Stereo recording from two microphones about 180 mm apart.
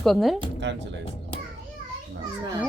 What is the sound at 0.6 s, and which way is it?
Speech, 80° right.